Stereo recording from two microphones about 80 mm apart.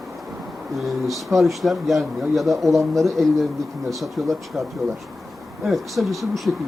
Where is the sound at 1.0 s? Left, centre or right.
Centre.